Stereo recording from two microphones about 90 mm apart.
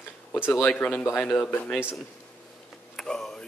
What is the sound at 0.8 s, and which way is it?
Speech, 15° left (ahead or behind).